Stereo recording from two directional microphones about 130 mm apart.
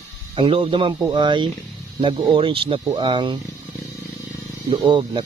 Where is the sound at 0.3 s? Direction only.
45° right (ahead or behind).